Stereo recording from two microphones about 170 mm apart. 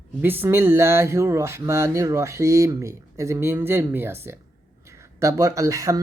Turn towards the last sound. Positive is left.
turn(degrees=-20)  # may be behind; listen again after turning